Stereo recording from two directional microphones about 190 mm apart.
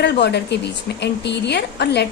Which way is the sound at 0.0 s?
60° left (ahead or behind).